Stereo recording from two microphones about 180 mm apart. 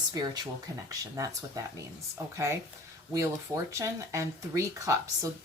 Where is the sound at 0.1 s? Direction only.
20° right (ahead or behind).